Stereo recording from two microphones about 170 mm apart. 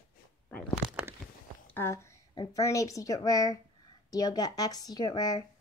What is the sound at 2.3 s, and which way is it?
Speech, 20° left (ahead or behind).